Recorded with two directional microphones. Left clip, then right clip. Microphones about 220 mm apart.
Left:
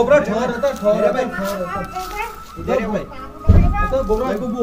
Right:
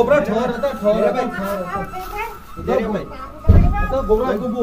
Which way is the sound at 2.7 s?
Centre (ahead or behind).